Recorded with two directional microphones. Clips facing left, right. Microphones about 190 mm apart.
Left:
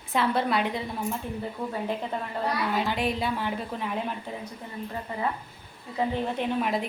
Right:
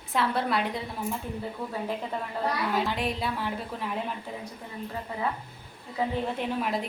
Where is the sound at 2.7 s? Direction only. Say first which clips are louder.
Left 1 dB; centre (ahead or behind).